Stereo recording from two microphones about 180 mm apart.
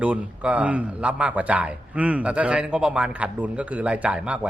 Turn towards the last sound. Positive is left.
turn(degrees=-5)  # may be behind; listen again after turning